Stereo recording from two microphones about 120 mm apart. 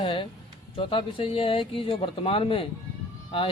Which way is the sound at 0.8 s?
45° left (ahead or behind).